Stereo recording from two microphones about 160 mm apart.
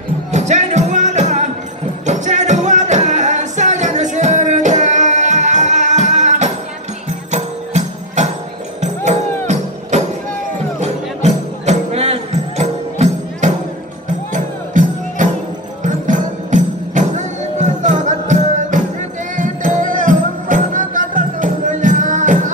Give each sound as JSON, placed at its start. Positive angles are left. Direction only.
{"t": 0.3, "sound": "music", "side_deg": -45}